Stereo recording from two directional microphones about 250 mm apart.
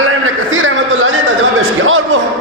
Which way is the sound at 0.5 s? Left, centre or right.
Right.